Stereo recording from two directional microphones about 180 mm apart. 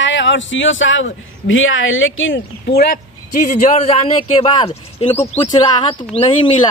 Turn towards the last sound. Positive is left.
turn(degrees=30)  # may be behind; listen again after turning